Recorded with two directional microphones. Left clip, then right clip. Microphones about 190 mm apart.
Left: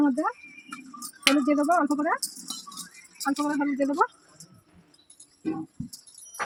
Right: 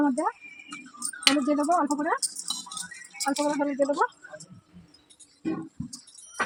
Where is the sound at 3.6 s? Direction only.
35° left (ahead or behind).